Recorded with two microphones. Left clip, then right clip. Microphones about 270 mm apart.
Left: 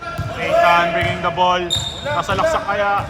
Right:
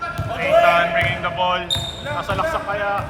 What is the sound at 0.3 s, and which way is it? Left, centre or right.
Basketball bounce, centre.